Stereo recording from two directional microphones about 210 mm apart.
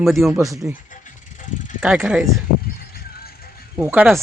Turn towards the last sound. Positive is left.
turn(degrees=-5)  # may be behind; listen again after turning